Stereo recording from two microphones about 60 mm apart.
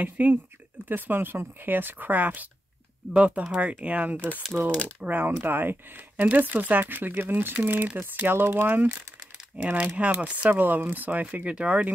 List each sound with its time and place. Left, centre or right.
0.0 s speech: right
10.5 s speech: right